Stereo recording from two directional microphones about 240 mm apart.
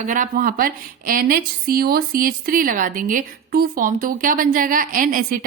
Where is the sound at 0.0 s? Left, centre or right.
Right.